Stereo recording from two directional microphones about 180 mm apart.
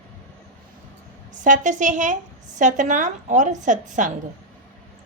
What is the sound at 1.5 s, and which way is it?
A woman's voice, 45° right (ahead or behind).